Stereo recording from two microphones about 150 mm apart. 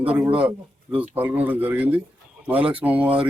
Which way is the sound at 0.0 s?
10° right (ahead or behind).